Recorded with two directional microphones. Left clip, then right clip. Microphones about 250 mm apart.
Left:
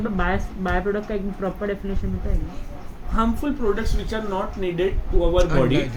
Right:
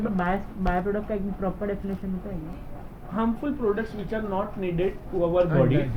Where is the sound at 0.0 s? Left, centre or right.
Left.